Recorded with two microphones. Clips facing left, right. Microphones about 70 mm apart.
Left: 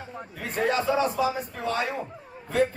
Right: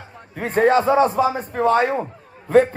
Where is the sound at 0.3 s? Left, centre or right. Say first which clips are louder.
Right 10 dB; right.